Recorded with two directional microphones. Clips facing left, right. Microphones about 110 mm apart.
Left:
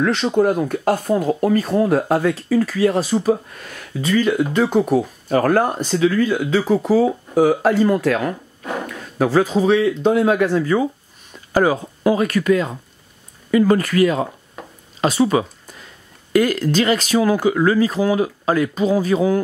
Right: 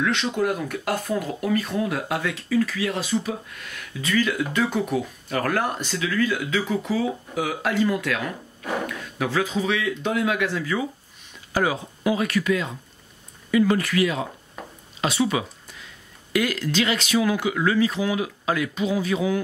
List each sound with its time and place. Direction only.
0.0 s speech: 35° left (ahead or behind)